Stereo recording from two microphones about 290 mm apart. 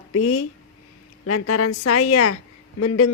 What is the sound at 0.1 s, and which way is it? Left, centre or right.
Speech, left.